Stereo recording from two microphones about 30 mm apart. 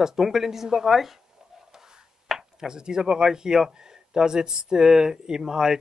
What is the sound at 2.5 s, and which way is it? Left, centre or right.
Speech, right.